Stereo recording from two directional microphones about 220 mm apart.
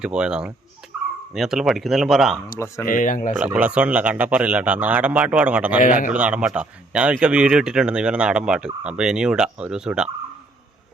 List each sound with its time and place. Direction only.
0.0 s speech: 5° right (ahead or behind)
0.9 s dog: 5° right (ahead or behind)
1.3 s speech: centre (ahead or behind)
2.8 s speech: 35° left (ahead or behind)
3.3 s a man's voice: 5° right (ahead or behind)
5.8 s speech: 35° left (ahead or behind)
6.1 s speech: 5° right (ahead or behind)